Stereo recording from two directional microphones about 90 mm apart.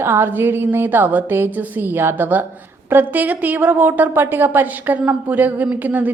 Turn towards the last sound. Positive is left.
turn(degrees=-20)  # may be behind; listen again after turning